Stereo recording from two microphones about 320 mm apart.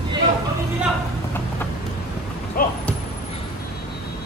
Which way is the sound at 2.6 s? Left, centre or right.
Left.